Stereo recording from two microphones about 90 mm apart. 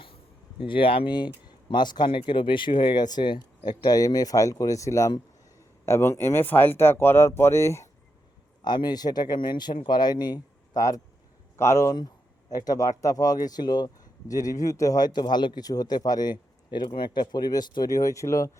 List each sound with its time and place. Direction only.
0.6 s speech: 75° left (ahead or behind)
1.7 s speech: 55° left (ahead or behind)
2.2 s speech: 70° left (ahead or behind); by 7.9 s 30° left (ahead or behind)
8.6 s speech: 55° left (ahead or behind); by 18.5 s 35° left (ahead or behind)